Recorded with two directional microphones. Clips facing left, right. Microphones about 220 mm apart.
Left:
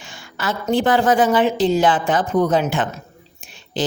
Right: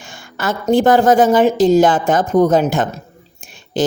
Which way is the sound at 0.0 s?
50° right (ahead or behind).